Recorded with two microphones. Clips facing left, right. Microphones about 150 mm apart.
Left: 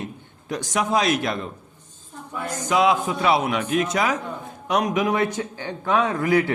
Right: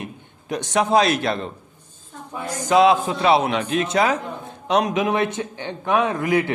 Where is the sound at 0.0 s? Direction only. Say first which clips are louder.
Even; 20° right (ahead or behind).